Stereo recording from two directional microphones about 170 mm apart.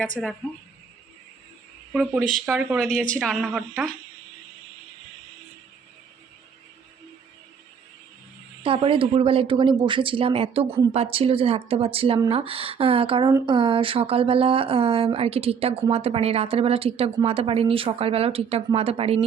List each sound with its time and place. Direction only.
0.2 s a woman's voice: centre (ahead or behind)
2.5 s a woman's voice: 5° right (ahead or behind)
8.6 s speech: 30° right (ahead or behind)